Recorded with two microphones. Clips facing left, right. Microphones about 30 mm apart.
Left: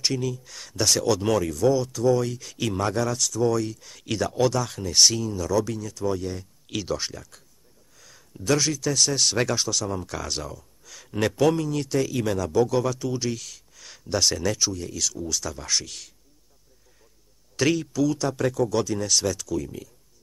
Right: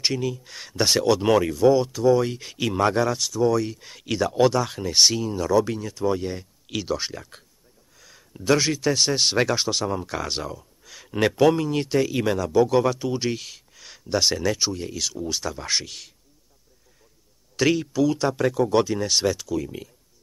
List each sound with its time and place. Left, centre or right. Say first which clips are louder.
0.0 s speech: right 1 dB; centre
3.7 s speech: right 3 dB; right
4.0 s speech: right 3 dB; centre
6.7 s speech: right 2 dB; centre
8.3 s speech: right 3 dB; right
12.6 s speech: right 4 dB; right
13.7 s speech: right 2 dB; centre
17.6 s speech: right 2 dB; centre
18.0 s speech: right 2 dB; right